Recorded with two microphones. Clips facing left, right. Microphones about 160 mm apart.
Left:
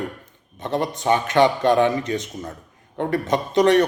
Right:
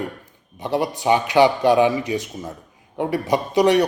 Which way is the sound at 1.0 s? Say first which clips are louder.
Right 2 dB; 15° right (ahead or behind).